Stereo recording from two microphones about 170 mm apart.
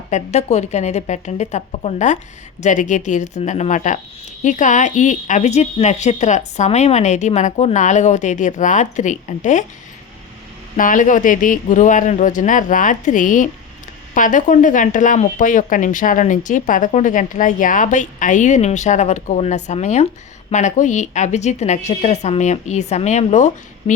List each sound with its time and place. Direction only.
0.1 s speech: 40° left (ahead or behind)
10.8 s speech: 50° left (ahead or behind)